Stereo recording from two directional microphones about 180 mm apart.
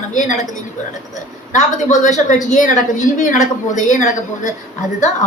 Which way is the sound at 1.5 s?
45° left (ahead or behind).